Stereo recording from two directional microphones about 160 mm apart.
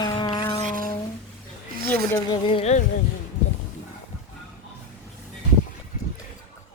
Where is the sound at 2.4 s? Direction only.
40° left (ahead or behind).